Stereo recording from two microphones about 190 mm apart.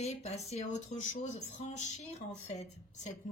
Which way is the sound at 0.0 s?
35° left (ahead or behind).